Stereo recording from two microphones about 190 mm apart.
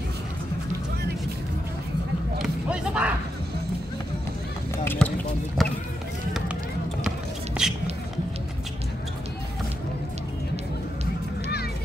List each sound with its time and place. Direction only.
2.4 s a sound: 5° right (ahead or behind)
4.8 s speech: 10° left (ahead or behind)
7.6 s music: 5° right (ahead or behind)